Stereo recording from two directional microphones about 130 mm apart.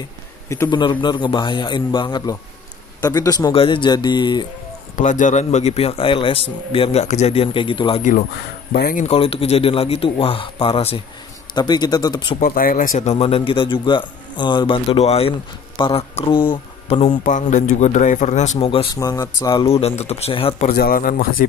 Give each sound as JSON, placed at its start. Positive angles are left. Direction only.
{"t": 0.7, "sound": "a man's voice", "side_deg": 35}
{"t": 3.5, "sound": "a man's voice", "side_deg": 45}
{"t": 4.9, "sound": "a man's voice", "side_deg": 75}
{"t": 8.8, "sound": "speech", "side_deg": 90}
{"t": 9.1, "sound": "a man's voice", "side_deg": 45}
{"t": 11.5, "sound": "a man's voice", "side_deg": 30}
{"t": 12.4, "sound": "a man's voice", "side_deg": 90}
{"t": 17.2, "sound": "a man's voice", "side_deg": 75}
{"t": 18.6, "sound": "a man's voice", "side_deg": 45}
{"t": 18.9, "sound": "speech", "side_deg": 25}
{"t": 19.6, "sound": "a man's voice", "side_deg": 50}
{"t": 20.5, "sound": "speech", "side_deg": 75}